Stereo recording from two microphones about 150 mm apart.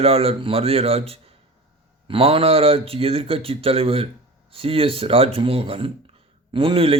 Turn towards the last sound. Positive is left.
turn(degrees=-40)  # may be behind; listen again after turning